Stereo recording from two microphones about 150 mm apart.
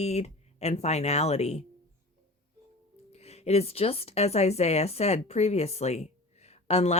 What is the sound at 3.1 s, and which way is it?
A woman's voice, 45° left (ahead or behind).